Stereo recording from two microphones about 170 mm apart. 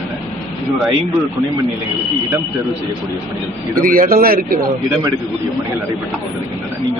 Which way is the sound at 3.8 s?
55° right (ahead or behind).